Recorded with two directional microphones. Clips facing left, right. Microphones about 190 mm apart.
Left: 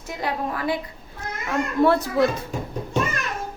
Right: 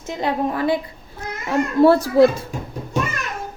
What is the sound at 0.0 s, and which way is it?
A woman's voice, 25° right (ahead or behind).